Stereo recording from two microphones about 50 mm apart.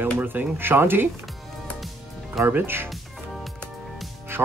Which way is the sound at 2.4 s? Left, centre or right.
Right.